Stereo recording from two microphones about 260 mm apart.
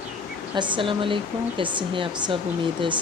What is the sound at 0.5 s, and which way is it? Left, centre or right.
Speech, centre.